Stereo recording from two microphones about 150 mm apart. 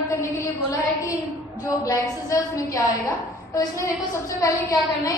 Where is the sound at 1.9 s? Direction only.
20° left (ahead or behind).